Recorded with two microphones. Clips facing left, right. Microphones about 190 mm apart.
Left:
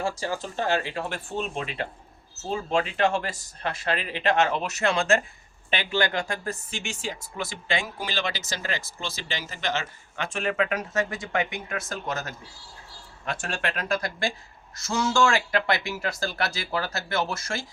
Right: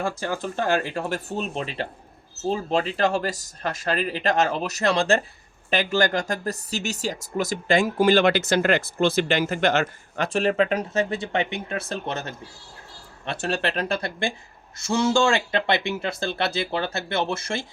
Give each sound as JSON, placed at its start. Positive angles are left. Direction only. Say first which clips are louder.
{"t": 0.0, "sound": "speech", "louder": "right 2 dB", "side_deg": -55}
{"t": 10.2, "sound": "speech", "louder": "right 6 dB", "side_deg": -35}
{"t": 13.4, "sound": "speech", "louder": "right 8 dB", "side_deg": -35}
{"t": 15.3, "sound": "speech", "louder": "right 2 dB", "side_deg": -25}